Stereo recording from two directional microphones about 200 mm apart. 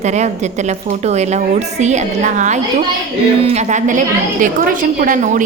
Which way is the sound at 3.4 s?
35° right (ahead or behind).